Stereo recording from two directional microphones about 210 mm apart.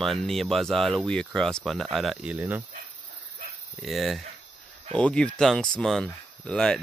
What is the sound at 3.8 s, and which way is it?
Speech, centre (ahead or behind).